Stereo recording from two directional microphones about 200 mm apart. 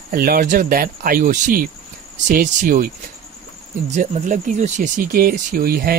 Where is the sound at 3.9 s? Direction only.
35° right (ahead or behind).